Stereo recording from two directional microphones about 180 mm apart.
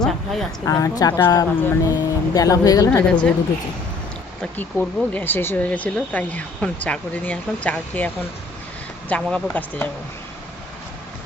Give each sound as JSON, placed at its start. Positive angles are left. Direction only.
{"t": 0.0, "sound": "a sound", "side_deg": 0}
{"t": 0.6, "sound": "speech", "side_deg": 20}
{"t": 3.1, "sound": "speech", "side_deg": 5}
{"t": 4.4, "sound": "speech", "side_deg": 10}